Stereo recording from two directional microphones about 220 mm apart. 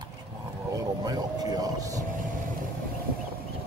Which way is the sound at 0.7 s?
15° right (ahead or behind).